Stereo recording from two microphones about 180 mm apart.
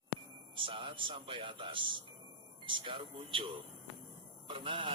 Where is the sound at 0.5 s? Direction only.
30° right (ahead or behind).